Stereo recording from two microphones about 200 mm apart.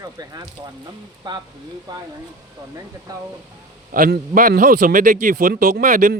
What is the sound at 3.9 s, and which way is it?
A man's voice, 45° right (ahead or behind).